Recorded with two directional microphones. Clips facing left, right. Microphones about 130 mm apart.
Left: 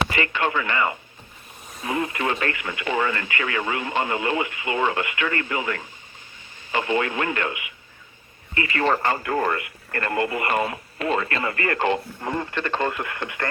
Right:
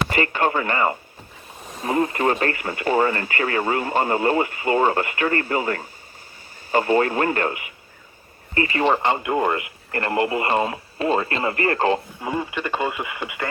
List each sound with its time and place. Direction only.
0.1 s speech: 40° right (ahead or behind)
8.8 s speech: 20° right (ahead or behind)
12.2 s speech: 10° right (ahead or behind)